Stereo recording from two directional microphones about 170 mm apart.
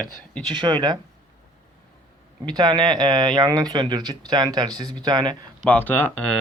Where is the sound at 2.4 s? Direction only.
25° right (ahead or behind).